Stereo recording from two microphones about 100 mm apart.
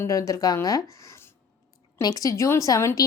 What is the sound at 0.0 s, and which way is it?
Speech, 35° left (ahead or behind).